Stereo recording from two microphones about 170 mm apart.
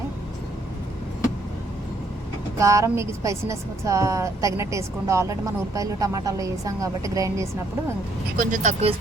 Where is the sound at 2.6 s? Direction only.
20° right (ahead or behind).